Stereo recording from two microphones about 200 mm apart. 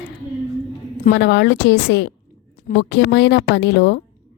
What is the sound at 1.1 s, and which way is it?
A woman's voice, 60° left (ahead or behind).